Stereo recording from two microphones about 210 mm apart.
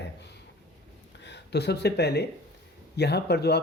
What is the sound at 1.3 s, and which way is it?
A man's voice, 55° left (ahead or behind).